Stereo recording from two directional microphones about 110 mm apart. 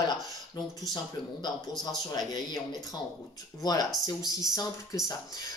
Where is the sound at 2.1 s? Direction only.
35° left (ahead or behind).